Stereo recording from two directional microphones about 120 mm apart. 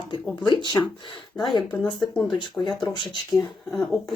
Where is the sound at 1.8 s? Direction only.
5° left (ahead or behind).